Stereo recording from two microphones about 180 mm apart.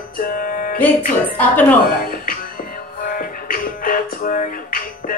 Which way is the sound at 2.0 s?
55° left (ahead or behind).